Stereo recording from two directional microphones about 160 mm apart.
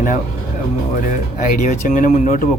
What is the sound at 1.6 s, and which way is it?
Speech, 55° left (ahead or behind).